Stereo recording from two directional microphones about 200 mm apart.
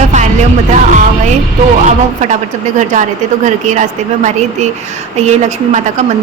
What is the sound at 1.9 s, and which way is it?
A woman's voice, 35° right (ahead or behind).